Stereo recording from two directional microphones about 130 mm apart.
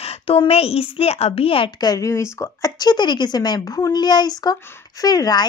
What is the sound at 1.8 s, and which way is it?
A woman's voice, 30° left (ahead or behind).